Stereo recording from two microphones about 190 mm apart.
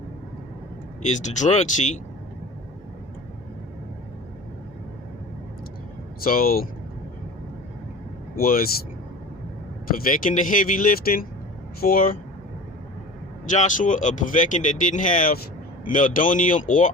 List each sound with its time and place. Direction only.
1.0 s speech: 40° left (ahead or behind)
6.2 s speech: 50° left (ahead or behind)
8.4 s speech: 50° left (ahead or behind)
10.1 s speech: 45° left (ahead or behind)
13.5 s speech: 40° left (ahead or behind)